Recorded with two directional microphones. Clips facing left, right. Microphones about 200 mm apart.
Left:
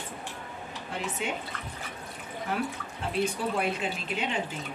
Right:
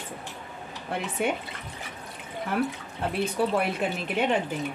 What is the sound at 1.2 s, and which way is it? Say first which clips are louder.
Speech: right 7 dB; 60° right (ahead or behind).